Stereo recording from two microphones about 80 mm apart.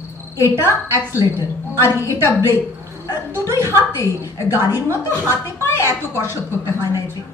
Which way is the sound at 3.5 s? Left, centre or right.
Left.